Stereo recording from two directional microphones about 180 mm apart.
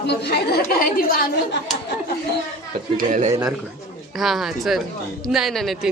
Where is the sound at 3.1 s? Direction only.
45° right (ahead or behind).